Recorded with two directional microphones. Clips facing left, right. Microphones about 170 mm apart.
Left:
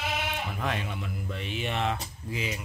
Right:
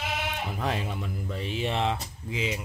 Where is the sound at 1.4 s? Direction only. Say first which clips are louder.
Right 3 dB; 30° right (ahead or behind).